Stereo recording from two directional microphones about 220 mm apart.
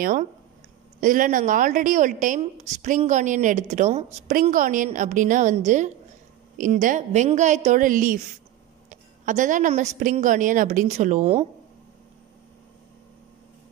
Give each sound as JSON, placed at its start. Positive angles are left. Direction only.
{"t": 0.0, "sound": "a woman's voice", "side_deg": -35}